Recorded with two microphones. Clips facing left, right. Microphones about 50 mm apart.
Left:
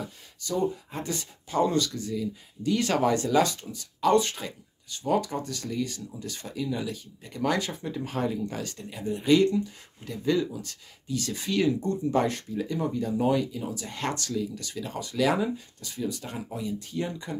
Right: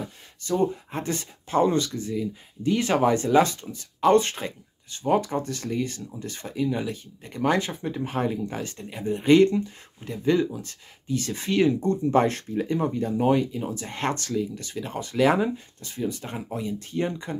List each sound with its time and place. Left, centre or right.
0.4 s speech: right